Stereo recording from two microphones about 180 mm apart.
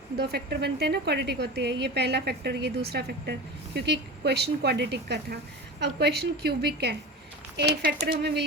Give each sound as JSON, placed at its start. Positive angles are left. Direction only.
{"t": 0.2, "sound": "a woman's voice", "side_deg": -65}